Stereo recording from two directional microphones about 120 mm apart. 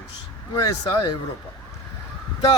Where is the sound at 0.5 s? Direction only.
30° left (ahead or behind).